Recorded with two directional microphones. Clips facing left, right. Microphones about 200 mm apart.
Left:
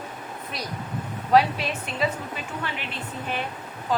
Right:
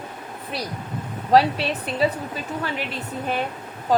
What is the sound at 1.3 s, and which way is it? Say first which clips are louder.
Speech: right 2 dB; 35° right (ahead or behind).